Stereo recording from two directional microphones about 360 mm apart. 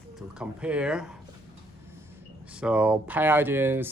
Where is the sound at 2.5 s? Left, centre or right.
Centre.